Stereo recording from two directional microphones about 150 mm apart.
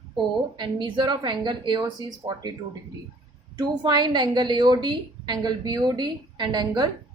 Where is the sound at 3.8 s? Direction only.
30° right (ahead or behind).